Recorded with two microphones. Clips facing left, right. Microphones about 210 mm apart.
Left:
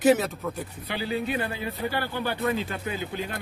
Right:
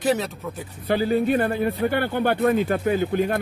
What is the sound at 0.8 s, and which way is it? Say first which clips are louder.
Speech: right 9 dB; 50° right (ahead or behind).